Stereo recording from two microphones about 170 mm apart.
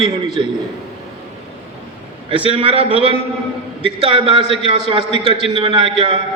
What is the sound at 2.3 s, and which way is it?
A man's voice, 35° right (ahead or behind).